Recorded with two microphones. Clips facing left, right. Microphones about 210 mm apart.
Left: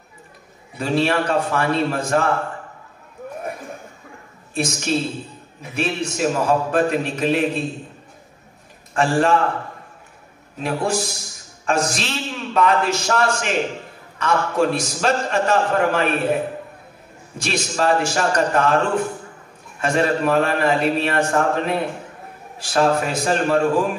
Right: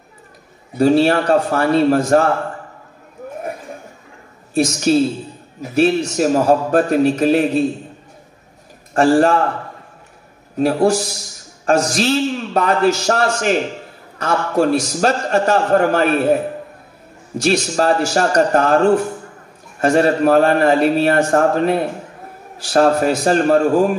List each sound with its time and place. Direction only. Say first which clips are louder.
0.7 s a man's voice: right 7 dB; 40° right (ahead or behind)
4.6 s a man's voice: right 8 dB; 40° right (ahead or behind)
8.9 s a man's voice: right 6 dB; 40° right (ahead or behind)
10.6 s a man's voice: right 8 dB; 40° right (ahead or behind)
17.4 s a man's voice: right 6 dB; 40° right (ahead or behind)
19.8 s a man's voice: right 6 dB; 40° right (ahead or behind)